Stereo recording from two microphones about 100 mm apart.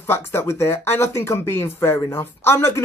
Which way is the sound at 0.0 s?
25° left (ahead or behind).